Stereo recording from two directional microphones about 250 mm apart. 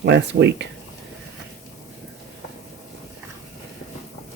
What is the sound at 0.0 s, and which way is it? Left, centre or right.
Speech, right.